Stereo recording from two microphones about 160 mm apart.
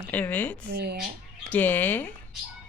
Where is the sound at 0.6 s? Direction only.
75° right (ahead or behind).